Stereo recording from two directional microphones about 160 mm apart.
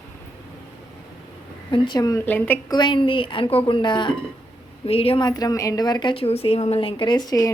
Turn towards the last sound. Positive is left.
turn(degrees=20)  # may be behind; listen again after turning